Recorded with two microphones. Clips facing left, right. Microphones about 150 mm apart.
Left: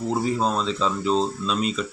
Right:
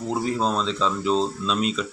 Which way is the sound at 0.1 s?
5° left (ahead or behind).